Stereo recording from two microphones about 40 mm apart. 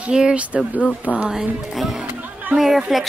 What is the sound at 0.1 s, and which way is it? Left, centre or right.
Speech, right.